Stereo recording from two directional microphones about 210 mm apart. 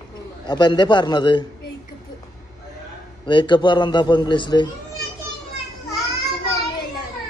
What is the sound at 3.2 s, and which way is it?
A child's voice, 20° left (ahead or behind).